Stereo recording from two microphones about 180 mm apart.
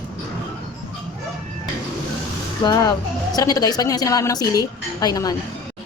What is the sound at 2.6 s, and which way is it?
A woman's voice, 25° left (ahead or behind).